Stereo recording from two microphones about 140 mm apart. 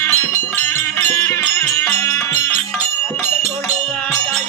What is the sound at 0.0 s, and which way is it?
Music, 15° left (ahead or behind).